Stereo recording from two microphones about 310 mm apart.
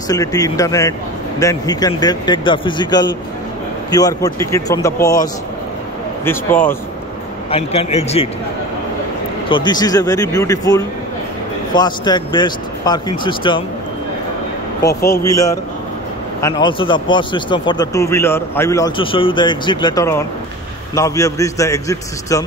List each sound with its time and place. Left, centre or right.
0.1 s speech: centre
7.5 s a man's voice: centre
9.5 s speech: centre
14.8 s a man's voice: left
15.3 s speech: centre